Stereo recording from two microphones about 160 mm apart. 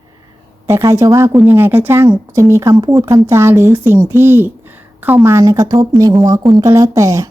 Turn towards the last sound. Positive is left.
turn(degrees=-20)  # may be behind; listen again after turning